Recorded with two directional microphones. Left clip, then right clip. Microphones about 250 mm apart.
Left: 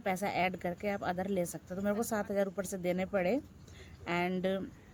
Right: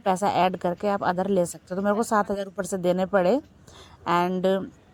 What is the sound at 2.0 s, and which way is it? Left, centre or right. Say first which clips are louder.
Speech: right 9 dB; right.